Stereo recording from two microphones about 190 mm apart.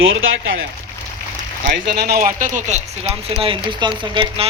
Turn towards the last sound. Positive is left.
turn(degrees=-25)  # may be behind; listen again after turning